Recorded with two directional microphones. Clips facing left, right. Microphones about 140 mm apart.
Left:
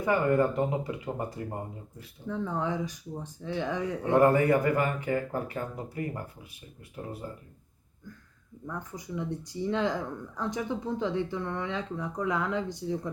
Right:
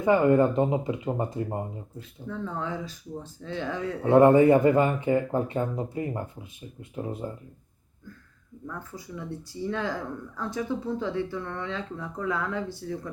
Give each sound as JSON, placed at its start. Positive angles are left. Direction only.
{"t": 0.0, "sound": "speech", "side_deg": -20}
{"t": 2.2, "sound": "speech", "side_deg": 15}
{"t": 4.1, "sound": "speech", "side_deg": -20}
{"t": 8.6, "sound": "speech", "side_deg": 20}